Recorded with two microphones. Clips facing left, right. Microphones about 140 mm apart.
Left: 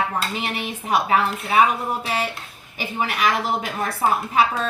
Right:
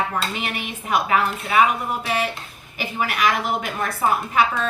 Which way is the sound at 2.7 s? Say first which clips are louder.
Even; 30° left (ahead or behind).